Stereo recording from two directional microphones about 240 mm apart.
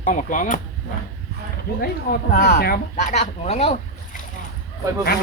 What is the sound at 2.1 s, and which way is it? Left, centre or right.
Speech, left.